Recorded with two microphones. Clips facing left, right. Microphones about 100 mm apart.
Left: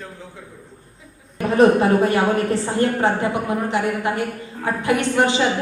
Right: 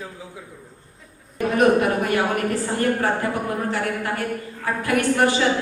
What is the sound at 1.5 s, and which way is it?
A woman's voice, 30° left (ahead or behind).